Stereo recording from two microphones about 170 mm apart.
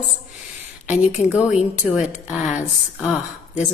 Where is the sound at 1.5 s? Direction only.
5° right (ahead or behind).